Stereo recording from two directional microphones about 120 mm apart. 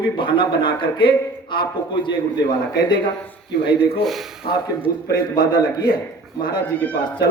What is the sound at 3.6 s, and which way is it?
A man's voice, 45° left (ahead or behind).